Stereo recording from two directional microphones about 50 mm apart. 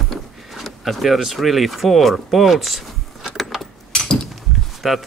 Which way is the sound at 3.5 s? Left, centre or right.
Centre.